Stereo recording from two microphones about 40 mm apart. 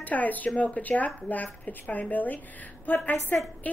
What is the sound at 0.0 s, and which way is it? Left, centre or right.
A woman's voice, left.